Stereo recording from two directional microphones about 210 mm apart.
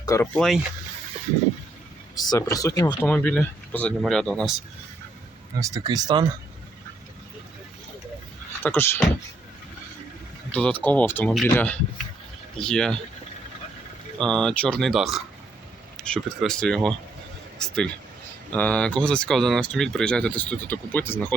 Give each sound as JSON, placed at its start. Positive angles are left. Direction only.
{"t": 0.0, "sound": "speech", "side_deg": 15}
{"t": 0.3, "sound": "speech", "side_deg": 0}
{"t": 2.2, "sound": "speech", "side_deg": 15}
{"t": 5.5, "sound": "speech", "side_deg": -15}
{"t": 8.6, "sound": "speech", "side_deg": 10}
{"t": 10.5, "sound": "speech", "side_deg": 5}
{"t": 14.2, "sound": "speech", "side_deg": 5}